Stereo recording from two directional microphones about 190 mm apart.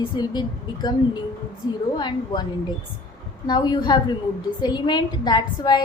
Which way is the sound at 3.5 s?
20° left (ahead or behind).